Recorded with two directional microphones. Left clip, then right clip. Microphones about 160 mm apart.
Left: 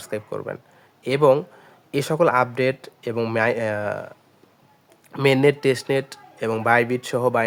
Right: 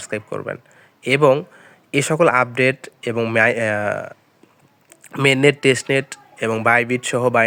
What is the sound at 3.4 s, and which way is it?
Speech, 20° right (ahead or behind).